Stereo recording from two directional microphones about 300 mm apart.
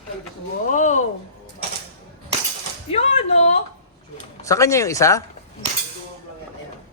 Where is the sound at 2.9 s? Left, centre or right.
Left.